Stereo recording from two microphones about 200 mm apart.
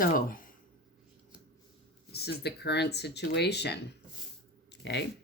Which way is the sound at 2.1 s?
55° left (ahead or behind).